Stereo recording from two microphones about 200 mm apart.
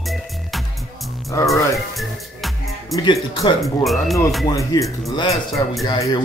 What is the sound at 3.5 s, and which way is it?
Speech, centre (ahead or behind).